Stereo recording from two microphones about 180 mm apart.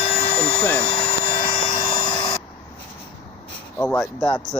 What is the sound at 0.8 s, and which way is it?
Helicopter, 30° left (ahead or behind).